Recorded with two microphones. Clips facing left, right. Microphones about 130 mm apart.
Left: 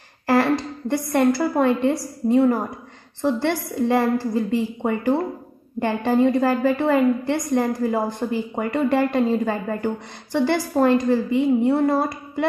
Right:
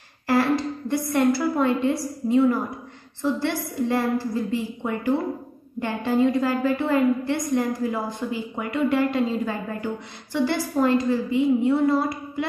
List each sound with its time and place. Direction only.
0.8 s a woman's voice: 55° left (ahead or behind)
7.6 s a woman's voice: 50° left (ahead or behind)